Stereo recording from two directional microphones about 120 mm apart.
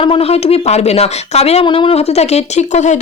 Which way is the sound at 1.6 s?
45° left (ahead or behind).